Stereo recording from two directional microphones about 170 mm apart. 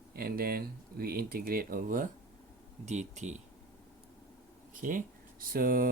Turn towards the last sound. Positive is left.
turn(degrees=-55)  # may be behind; listen again after turning